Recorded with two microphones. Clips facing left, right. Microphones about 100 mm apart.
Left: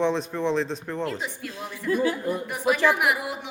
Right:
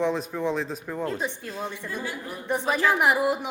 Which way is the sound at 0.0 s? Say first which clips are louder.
Left 1 dB; 5° right (ahead or behind).